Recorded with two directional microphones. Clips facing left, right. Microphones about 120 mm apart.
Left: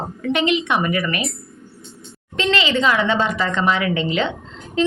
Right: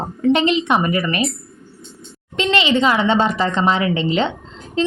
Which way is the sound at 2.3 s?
20° right (ahead or behind).